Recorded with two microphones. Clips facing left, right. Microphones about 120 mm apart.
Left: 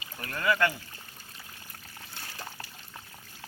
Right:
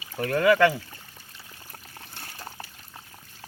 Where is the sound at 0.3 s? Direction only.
90° right.